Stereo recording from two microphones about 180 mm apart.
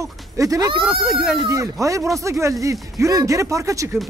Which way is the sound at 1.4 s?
15° right (ahead or behind).